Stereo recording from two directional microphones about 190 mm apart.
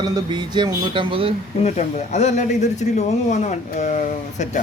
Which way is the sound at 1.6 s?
35° left (ahead or behind).